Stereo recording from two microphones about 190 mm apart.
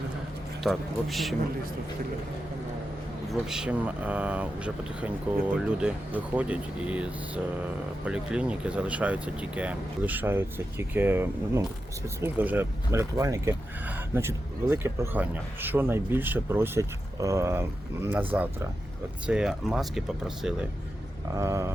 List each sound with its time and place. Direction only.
0.6 s speech: centre (ahead or behind)
3.4 s speech: 5° right (ahead or behind)
19.3 s speech: 5° right (ahead or behind)
21.3 s speech: 15° right (ahead or behind)